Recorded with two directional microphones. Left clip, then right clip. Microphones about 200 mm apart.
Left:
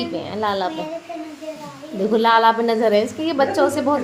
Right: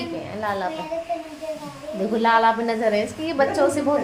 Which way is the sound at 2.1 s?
35° left (ahead or behind).